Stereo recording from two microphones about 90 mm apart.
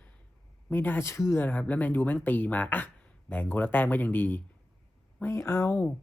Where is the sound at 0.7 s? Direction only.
20° left (ahead or behind).